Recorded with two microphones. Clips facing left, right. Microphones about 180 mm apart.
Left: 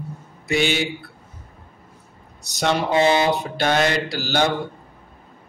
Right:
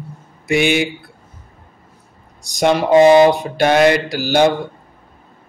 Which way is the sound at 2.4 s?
15° right (ahead or behind).